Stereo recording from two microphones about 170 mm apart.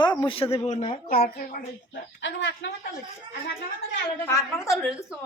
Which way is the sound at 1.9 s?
90° left.